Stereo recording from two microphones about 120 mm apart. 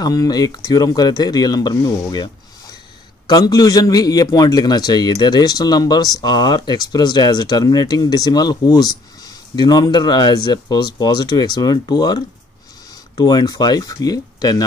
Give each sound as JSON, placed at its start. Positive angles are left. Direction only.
{"t": 0.0, "sound": "a man's voice", "side_deg": 30}
{"t": 3.3, "sound": "a man's voice", "side_deg": 35}
{"t": 13.2, "sound": "a man's voice", "side_deg": 35}